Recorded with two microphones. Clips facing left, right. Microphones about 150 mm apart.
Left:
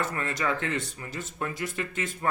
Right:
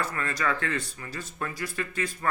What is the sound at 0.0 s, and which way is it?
Speech, 20° left (ahead or behind).